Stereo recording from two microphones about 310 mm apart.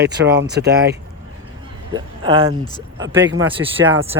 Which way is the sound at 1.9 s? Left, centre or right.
Centre.